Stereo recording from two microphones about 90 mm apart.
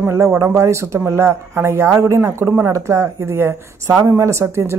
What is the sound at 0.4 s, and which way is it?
A woman's voice, 30° right (ahead or behind).